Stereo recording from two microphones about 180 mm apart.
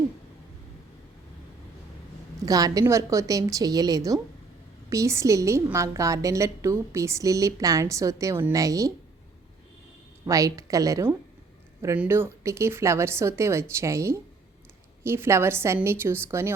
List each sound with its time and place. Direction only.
2.4 s a woman's voice: 20° right (ahead or behind)
10.2 s a woman's voice: 20° right (ahead or behind)